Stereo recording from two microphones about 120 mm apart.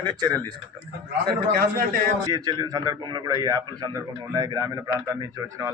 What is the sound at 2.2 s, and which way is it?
A man's voice, 40° right (ahead or behind).